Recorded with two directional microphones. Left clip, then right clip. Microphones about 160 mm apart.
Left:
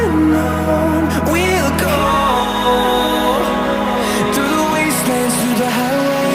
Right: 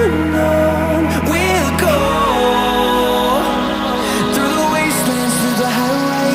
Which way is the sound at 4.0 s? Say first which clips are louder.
Even; centre (ahead or behind).